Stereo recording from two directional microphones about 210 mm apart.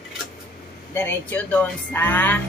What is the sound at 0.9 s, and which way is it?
Speech, 10° left (ahead or behind).